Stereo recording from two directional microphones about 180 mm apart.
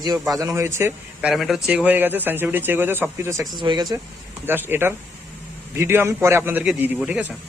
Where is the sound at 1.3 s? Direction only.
Centre (ahead or behind); by 4.0 s 20° right (ahead or behind).